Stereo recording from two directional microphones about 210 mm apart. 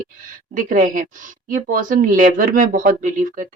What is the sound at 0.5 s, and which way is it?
Speech, 40° right (ahead or behind).